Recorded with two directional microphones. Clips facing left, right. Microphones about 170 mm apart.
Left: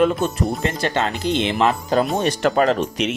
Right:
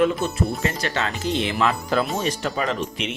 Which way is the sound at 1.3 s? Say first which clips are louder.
Left 3 dB; 25° left (ahead or behind).